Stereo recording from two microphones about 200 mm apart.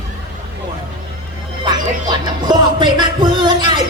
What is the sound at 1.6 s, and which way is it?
Music, 20° right (ahead or behind).